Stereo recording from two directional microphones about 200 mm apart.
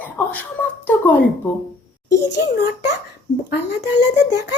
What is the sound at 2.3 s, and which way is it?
Speech, 60° left (ahead or behind).